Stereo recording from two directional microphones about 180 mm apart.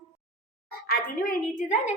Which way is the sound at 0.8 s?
50° left (ahead or behind).